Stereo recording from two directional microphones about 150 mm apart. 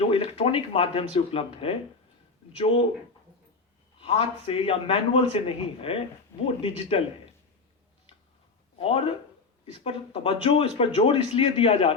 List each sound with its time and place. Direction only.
0.0 s speech: 35° left (ahead or behind)
4.0 s speech: 40° left (ahead or behind)
8.8 s speech: 40° left (ahead or behind)